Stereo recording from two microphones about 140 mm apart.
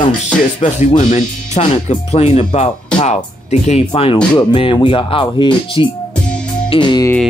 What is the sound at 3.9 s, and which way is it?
Speech, 40° left (ahead or behind).